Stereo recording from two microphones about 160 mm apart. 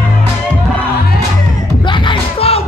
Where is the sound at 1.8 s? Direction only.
35° left (ahead or behind).